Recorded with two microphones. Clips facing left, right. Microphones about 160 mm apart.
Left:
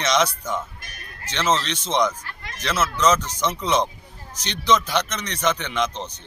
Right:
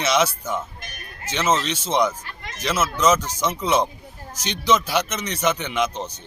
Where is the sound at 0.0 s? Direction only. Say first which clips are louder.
Right 1 dB; 5° right (ahead or behind).